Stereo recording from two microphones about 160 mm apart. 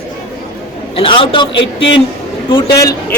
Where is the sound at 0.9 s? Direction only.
35° left (ahead or behind).